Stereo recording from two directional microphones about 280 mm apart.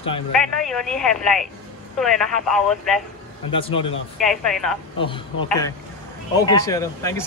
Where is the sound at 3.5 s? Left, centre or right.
Centre.